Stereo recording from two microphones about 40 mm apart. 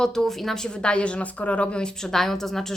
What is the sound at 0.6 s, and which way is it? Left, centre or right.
A woman's voice, left.